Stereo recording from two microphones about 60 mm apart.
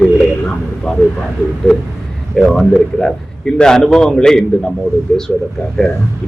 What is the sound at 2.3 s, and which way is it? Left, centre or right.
A man's voice, centre.